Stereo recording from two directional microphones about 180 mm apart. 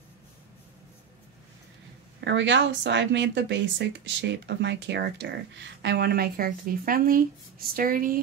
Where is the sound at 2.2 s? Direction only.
90° right; by 8.2 s 50° right (ahead or behind).